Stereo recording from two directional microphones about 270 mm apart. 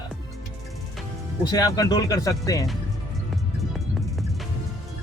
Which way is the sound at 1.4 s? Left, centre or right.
Centre.